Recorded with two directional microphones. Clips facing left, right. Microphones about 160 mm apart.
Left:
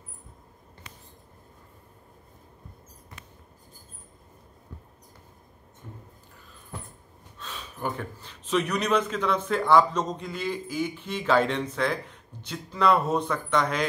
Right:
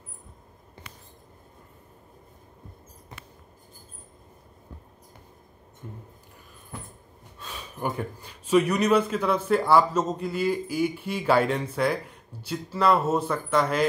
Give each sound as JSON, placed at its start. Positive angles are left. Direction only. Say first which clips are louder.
{"t": 7.3, "sound": "speech", "louder": "right 1 dB", "side_deg": -10}